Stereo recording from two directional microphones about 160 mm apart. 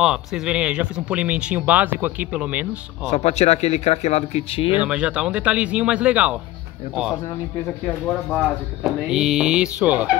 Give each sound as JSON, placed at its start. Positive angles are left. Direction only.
{"t": 0.0, "sound": "speech", "side_deg": -5}
{"t": 3.1, "sound": "speech", "side_deg": 40}
{"t": 4.7, "sound": "speech", "side_deg": -5}
{"t": 7.8, "sound": "speech", "side_deg": 5}